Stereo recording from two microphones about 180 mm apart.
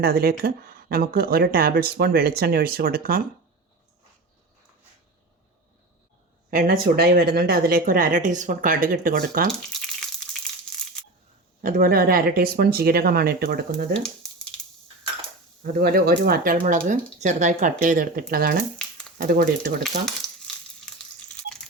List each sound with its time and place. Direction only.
0.0 s speech: 55° right (ahead or behind)
6.5 s speech: 50° right (ahead or behind)
9.5 s a sound: centre (ahead or behind)
11.6 s speech: 50° right (ahead or behind)
14.2 s a sound: centre (ahead or behind)
15.6 s speech: 60° right (ahead or behind)
20.2 s crumpling: centre (ahead or behind)